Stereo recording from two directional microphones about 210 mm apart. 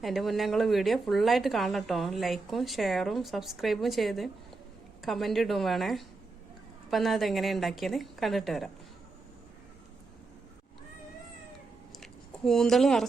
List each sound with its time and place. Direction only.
0.0 s a woman's voice: centre (ahead or behind)
12.5 s a woman's voice: centre (ahead or behind)